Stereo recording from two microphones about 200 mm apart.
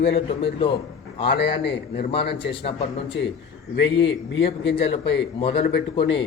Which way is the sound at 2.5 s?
25° left (ahead or behind).